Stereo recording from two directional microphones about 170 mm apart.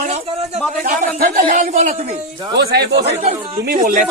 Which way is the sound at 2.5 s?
70° right (ahead or behind).